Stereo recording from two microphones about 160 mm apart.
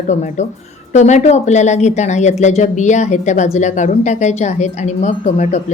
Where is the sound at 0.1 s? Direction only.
45° left (ahead or behind).